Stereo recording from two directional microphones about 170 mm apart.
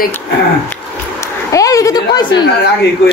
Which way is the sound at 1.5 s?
20° left (ahead or behind).